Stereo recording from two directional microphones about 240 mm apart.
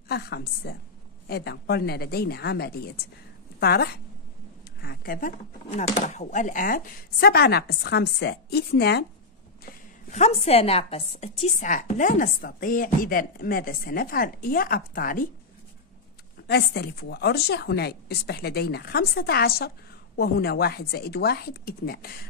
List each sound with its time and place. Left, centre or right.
0.1 s a woman's voice: left
9.7 s a woman's voice: left
16.4 s a woman's voice: left